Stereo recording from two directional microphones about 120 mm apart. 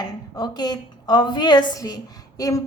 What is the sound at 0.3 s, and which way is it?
A woman's voice, 35° left (ahead or behind).